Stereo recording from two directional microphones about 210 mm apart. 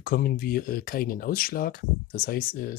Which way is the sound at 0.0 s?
45° left (ahead or behind).